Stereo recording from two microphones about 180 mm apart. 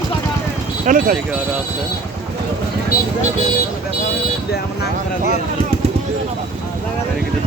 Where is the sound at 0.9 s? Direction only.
50° right (ahead or behind).